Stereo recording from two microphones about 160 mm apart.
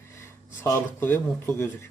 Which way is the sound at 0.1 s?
15° left (ahead or behind).